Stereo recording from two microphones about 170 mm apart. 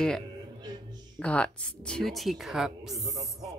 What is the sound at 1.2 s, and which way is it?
Speech, 5° left (ahead or behind).